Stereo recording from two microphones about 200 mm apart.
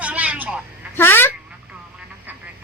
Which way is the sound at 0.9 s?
10° left (ahead or behind).